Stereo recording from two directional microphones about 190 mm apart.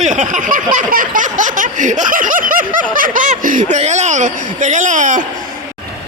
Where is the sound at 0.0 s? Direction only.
40° right (ahead or behind).